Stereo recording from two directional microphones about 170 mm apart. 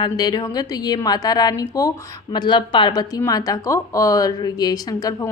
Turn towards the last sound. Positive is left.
turn(degrees=20)  # may be behind; listen again after turning